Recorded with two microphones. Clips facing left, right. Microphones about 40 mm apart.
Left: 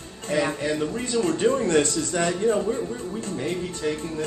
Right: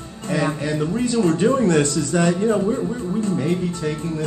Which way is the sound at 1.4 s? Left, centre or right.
Right.